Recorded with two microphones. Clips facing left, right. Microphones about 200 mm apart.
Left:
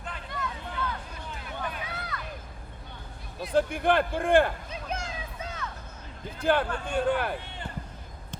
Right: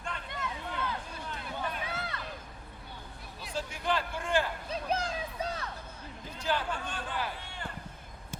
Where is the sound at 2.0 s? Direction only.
30° right (ahead or behind).